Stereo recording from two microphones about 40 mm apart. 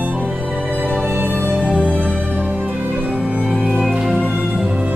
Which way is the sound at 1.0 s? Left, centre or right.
Right.